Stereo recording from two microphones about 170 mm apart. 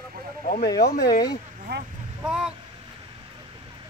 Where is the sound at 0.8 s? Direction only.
70° left (ahead or behind).